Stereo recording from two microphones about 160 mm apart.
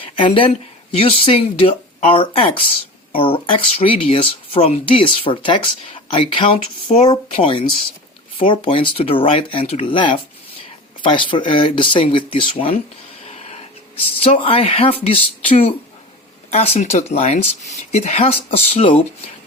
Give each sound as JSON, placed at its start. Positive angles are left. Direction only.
{"t": 0.0, "sound": "speech", "side_deg": 35}